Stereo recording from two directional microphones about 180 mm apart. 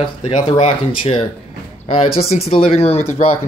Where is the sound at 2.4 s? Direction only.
35° left (ahead or behind).